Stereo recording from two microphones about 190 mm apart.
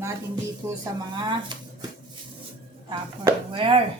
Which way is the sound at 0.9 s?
25° right (ahead or behind).